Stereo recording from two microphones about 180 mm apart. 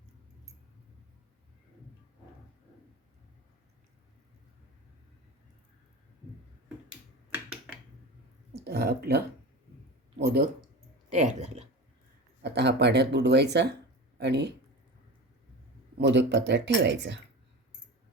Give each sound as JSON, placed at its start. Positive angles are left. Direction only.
{"t": 6.9, "sound": "finger snapping", "side_deg": -10}
{"t": 8.6, "sound": "speech", "side_deg": -60}
{"t": 11.1, "sound": "speech", "side_deg": -40}
{"t": 12.4, "sound": "speech", "side_deg": -70}
{"t": 16.0, "sound": "speech", "side_deg": -75}